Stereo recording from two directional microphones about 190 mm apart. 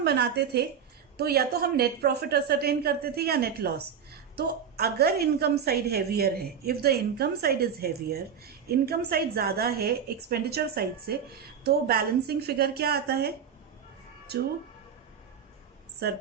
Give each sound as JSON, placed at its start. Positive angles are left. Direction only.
{"t": 0.0, "sound": "a woman's voice", "side_deg": -60}